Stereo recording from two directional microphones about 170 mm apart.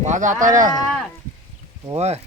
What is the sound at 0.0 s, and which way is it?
Speech, 45° right (ahead or behind).